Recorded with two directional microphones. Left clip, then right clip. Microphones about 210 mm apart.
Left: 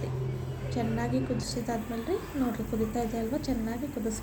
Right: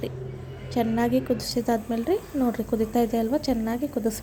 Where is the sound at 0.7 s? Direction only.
40° right (ahead or behind).